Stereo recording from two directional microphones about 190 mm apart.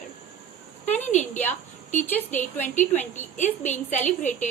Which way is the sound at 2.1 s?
10° left (ahead or behind).